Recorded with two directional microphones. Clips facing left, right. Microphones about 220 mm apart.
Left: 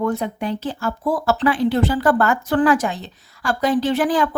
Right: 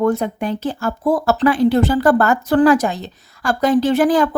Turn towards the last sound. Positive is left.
turn(degrees=-40)  # may be behind; listen again after turning